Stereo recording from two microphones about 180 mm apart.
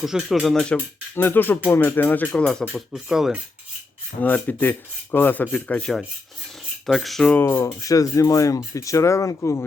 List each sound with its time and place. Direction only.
0.0 s speech: centre (ahead or behind)
4.2 s speech: 10° left (ahead or behind)